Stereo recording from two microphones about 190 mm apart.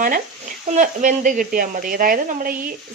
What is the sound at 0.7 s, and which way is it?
A woman's voice, 40° right (ahead or behind).